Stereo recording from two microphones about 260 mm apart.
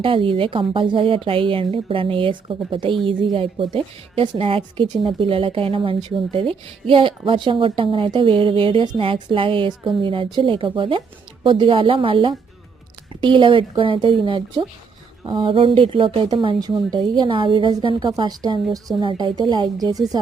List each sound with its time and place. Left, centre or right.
0.0 s a woman's voice: centre